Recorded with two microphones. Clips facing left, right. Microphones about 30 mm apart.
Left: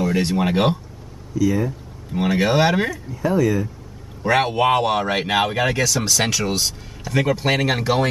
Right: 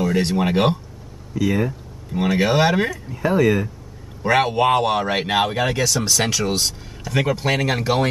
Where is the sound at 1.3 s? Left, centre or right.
Right.